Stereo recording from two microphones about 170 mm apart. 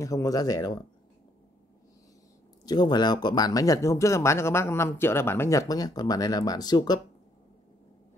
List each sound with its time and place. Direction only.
0.0 s speech: 20° left (ahead or behind)
2.6 s speech: 25° left (ahead or behind)